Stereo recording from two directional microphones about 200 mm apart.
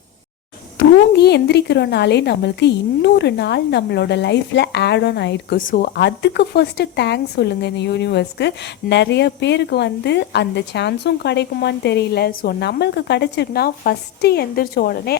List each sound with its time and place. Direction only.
0.8 s speech: 55° left (ahead or behind)
5.5 s speech: 40° left (ahead or behind)